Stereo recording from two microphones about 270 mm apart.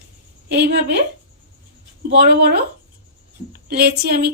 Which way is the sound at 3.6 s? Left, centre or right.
Right.